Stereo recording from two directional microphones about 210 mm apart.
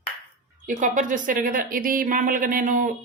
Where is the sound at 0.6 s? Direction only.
35° right (ahead or behind).